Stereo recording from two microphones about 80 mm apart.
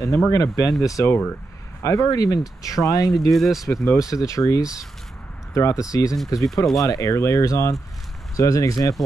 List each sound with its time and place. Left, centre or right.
0.3 s speech: left
3.2 s speech: centre
4.2 s speech: left
6.4 s speech: centre
6.8 s speech: left